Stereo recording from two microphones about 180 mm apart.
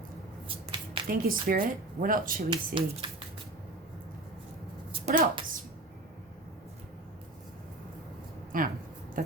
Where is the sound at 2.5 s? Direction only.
25° right (ahead or behind).